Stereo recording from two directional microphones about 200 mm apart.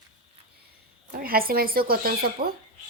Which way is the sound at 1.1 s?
45° right (ahead or behind).